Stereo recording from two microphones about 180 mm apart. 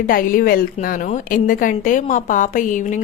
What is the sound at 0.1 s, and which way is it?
A woman's voice, 50° left (ahead or behind).